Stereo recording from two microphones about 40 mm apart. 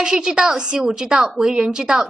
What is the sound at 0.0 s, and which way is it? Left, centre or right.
A woman's voice, centre.